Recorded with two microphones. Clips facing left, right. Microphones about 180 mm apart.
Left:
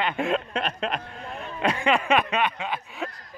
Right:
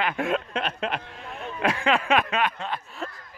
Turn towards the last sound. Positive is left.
turn(degrees=0)  # may be behind; listen again after turning